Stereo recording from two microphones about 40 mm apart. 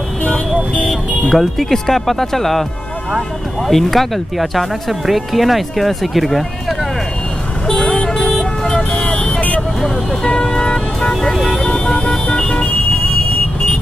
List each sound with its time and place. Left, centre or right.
1.3 s speech: centre
3.7 s speech: centre
7.6 s vehicle: centre
8.9 s vehicle: left